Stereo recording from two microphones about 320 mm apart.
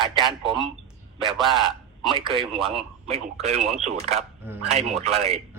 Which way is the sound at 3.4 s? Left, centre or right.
Centre.